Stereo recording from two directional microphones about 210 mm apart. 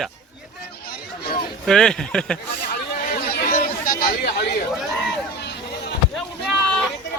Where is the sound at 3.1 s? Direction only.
40° left (ahead or behind).